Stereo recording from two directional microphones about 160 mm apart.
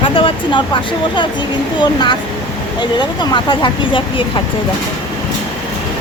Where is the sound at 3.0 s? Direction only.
25° left (ahead or behind).